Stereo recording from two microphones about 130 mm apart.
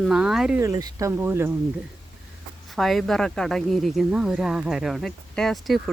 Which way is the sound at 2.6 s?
Centre (ahead or behind).